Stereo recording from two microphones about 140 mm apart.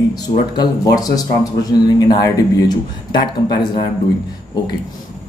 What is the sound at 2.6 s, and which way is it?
Speech, 30° left (ahead or behind).